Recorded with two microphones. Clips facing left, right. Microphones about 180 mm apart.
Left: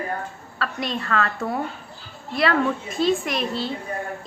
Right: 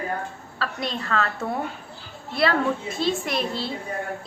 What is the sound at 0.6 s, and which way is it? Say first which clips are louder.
Speech: left 2 dB; 30° right (ahead or behind).